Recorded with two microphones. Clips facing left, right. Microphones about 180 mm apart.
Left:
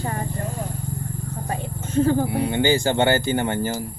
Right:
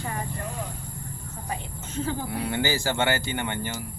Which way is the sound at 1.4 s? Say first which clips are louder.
Left 3 dB; 50° left (ahead or behind).